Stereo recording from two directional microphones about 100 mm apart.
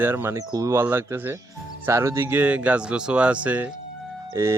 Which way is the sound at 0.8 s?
25° right (ahead or behind).